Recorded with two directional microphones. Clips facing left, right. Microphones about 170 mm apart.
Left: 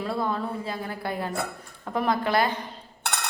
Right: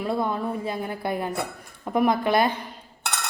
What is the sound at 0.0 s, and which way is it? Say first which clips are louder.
A woman's voice: right 2 dB; 20° right (ahead or behind).